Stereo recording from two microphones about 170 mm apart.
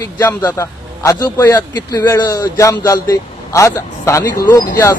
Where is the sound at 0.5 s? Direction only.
20° left (ahead or behind).